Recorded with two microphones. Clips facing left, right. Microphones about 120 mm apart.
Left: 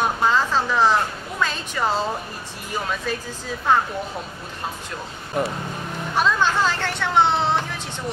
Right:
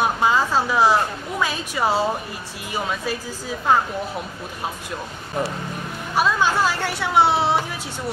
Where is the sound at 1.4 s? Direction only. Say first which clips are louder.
Right 1 dB; 10° right (ahead or behind).